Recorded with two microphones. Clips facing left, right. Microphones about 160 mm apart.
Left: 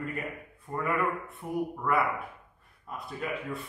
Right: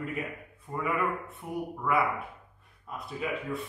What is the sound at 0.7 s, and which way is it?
A man's voice, centre (ahead or behind).